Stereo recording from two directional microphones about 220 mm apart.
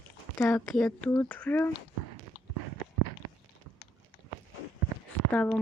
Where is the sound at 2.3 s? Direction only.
20° left (ahead or behind).